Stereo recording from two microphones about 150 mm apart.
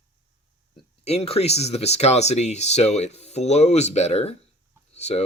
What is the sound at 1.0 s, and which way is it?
Speech, 45° left (ahead or behind).